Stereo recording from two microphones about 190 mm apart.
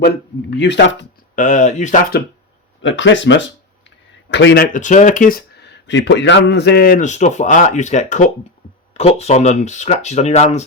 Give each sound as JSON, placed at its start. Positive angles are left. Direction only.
{"t": 0.5, "sound": "speech", "side_deg": 65}
{"t": 1.4, "sound": "speech", "side_deg": 40}
{"t": 2.8, "sound": "speech", "side_deg": 75}
{"t": 4.6, "sound": "speech", "side_deg": 40}
{"t": 5.5, "sound": "a man's voice", "side_deg": 65}